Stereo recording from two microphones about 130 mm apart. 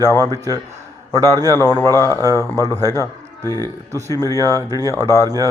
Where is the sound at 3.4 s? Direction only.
20° left (ahead or behind).